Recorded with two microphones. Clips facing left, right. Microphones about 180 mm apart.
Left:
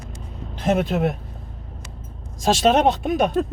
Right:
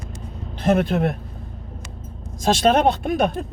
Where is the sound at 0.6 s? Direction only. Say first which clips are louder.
Right 2 dB; 55° right (ahead or behind).